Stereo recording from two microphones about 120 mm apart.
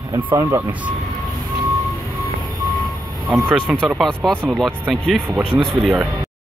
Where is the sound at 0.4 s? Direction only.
20° right (ahead or behind).